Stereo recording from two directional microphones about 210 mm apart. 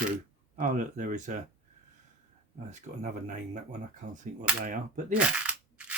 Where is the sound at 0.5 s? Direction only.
35° right (ahead or behind).